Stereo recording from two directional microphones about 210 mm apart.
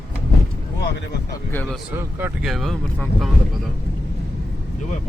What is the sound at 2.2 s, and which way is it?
Speech, centre (ahead or behind).